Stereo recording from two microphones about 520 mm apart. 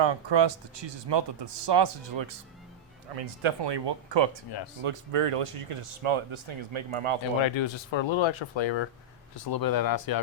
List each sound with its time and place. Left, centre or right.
0.0 s speech: right
3.1 s speech: right
3.6 s speech: right
4.8 s speech: right
7.4 s speech: left
9.3 s speech: left